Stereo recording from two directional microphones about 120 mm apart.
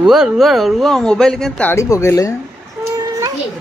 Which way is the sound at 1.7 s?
25° left (ahead or behind).